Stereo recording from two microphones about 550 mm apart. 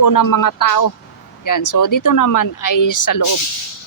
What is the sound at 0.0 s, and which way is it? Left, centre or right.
Speech, left.